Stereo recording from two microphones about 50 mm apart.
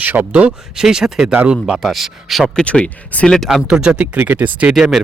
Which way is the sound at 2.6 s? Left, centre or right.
Left.